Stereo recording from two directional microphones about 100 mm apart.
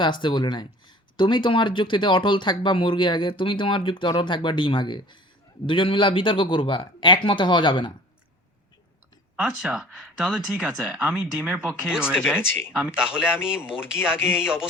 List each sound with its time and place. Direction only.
0.0 s speech: 55° left (ahead or behind)
9.3 s speech: 10° right (ahead or behind)
14.3 s speech: 5° right (ahead or behind)